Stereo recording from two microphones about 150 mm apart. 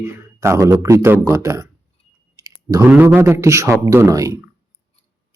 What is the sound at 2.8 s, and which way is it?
Speech, 10° right (ahead or behind).